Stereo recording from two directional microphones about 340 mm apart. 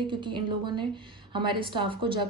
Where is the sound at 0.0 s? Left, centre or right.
Centre.